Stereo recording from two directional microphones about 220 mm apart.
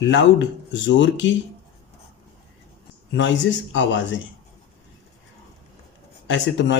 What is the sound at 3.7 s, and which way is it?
Speech, 55° left (ahead or behind).